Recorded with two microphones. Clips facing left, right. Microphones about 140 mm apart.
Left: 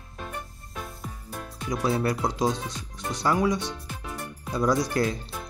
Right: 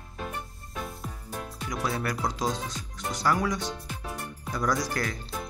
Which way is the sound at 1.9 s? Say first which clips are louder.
Left 5 dB; 25° left (ahead or behind).